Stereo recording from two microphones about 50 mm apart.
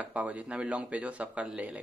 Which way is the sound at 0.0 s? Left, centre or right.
Right.